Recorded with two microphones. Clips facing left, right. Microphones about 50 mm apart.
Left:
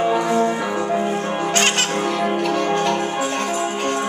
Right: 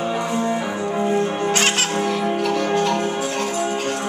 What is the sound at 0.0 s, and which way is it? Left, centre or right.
Music, left.